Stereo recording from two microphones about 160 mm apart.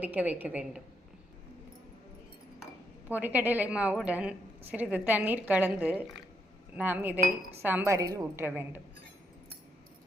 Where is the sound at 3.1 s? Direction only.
10° right (ahead or behind).